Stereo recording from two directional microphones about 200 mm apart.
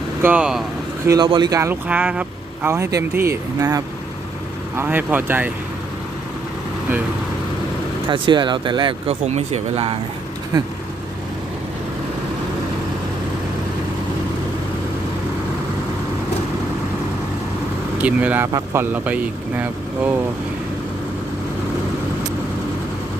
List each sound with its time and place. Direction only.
0.2 s speech: 10° right (ahead or behind)
1.0 s speech: 20° right (ahead or behind)
8.1 s speech: 25° right (ahead or behind)
10.5 s speech: 20° right (ahead or behind)
17.9 s speech: 5° right (ahead or behind)